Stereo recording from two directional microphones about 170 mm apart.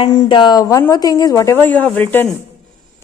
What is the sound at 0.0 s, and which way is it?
A woman's voice, 25° left (ahead or behind).